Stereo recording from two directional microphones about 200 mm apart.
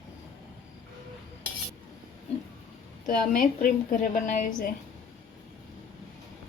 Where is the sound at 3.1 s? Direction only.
45° left (ahead or behind).